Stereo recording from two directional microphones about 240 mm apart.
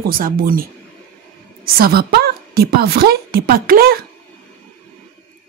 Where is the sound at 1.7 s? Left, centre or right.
Right.